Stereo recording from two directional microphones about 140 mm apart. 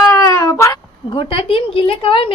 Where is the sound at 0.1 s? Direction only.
25° left (ahead or behind).